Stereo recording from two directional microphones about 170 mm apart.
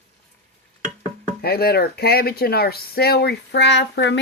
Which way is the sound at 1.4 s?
65° left (ahead or behind).